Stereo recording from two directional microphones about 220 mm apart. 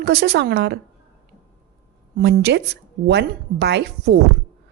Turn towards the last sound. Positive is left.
turn(degrees=-50)  # may be behind; listen again after turning